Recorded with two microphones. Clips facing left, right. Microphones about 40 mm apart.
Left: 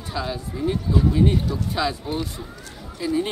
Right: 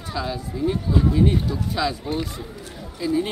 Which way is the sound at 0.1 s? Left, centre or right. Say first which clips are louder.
Even; centre.